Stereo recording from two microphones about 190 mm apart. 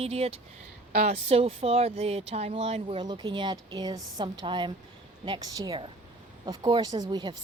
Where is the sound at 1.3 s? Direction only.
30° right (ahead or behind).